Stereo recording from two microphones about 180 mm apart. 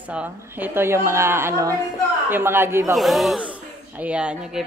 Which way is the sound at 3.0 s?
Centre (ahead or behind).